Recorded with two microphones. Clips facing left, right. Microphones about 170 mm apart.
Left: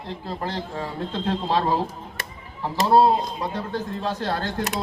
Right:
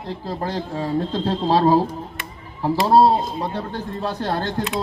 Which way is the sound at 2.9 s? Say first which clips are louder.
Right 2 dB; 35° right (ahead or behind).